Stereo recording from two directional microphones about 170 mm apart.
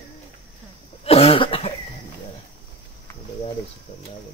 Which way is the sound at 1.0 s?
35° left (ahead or behind).